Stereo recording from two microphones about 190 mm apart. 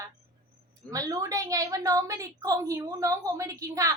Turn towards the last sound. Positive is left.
turn(degrees=-15)  # may be behind; listen again after turning